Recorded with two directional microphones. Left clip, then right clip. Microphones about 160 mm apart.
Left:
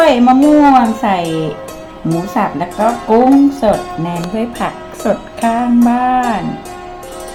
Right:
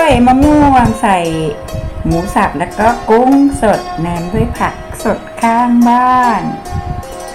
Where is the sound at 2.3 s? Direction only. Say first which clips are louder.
Right 4 dB; centre (ahead or behind).